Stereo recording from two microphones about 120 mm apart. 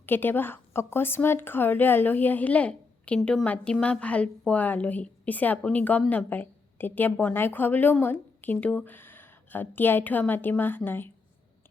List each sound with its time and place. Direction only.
0.0 s a woman's voice: 15° left (ahead or behind)